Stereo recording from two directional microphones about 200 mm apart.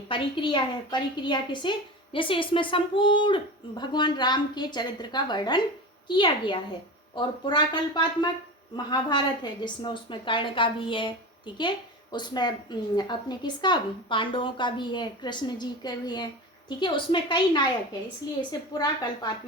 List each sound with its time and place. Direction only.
0.1 s a woman's voice: 25° left (ahead or behind)
18.7 s a woman's voice: 20° left (ahead or behind)